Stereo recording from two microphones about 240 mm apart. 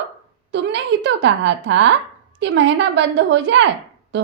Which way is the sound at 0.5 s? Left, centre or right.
Right.